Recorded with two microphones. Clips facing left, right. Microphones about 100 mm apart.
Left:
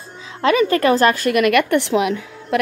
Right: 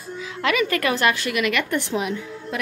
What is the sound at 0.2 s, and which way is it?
A woman's voice, 30° left (ahead or behind).